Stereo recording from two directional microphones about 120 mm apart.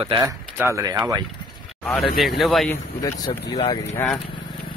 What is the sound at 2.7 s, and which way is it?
Speech, 30° left (ahead or behind).